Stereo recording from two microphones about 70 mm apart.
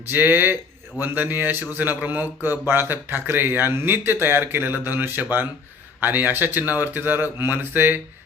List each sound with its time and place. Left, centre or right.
0.1 s speech: right